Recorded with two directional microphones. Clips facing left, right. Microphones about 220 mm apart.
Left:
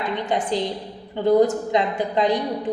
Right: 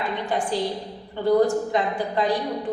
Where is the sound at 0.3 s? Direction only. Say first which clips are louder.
Left 1 dB; 20° left (ahead or behind).